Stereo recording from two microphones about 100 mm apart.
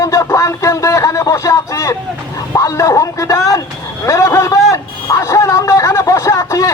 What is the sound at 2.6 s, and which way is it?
Speech, 35° left (ahead or behind).